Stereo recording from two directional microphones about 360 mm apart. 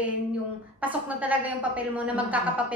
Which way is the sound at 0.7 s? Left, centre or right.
Centre.